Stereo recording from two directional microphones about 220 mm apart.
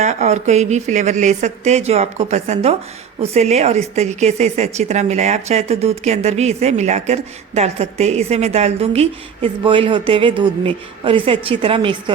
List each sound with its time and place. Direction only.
0.0 s a woman's voice: 30° right (ahead or behind)